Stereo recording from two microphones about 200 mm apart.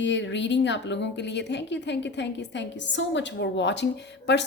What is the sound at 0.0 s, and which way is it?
A woman's voice, 65° left (ahead or behind).